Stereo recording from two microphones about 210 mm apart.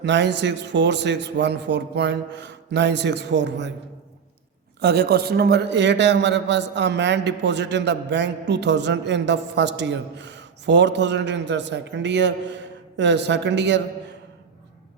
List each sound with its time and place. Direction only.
0.0 s a man's voice: 55° right (ahead or behind)
4.8 s a man's voice: 50° right (ahead or behind)